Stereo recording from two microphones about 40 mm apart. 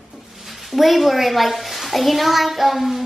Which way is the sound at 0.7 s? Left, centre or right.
Centre.